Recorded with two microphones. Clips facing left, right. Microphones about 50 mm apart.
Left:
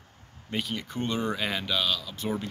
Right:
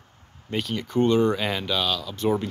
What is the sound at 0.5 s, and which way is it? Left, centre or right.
Speech, centre.